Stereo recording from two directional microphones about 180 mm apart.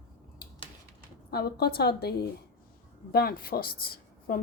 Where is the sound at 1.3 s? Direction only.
60° left (ahead or behind).